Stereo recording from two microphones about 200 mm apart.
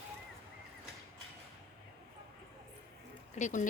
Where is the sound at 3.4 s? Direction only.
40° left (ahead or behind).